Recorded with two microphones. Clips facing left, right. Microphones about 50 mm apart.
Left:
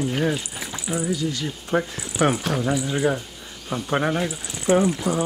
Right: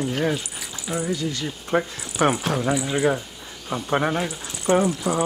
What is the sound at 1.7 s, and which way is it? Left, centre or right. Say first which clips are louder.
Speech: right 1 dB; right.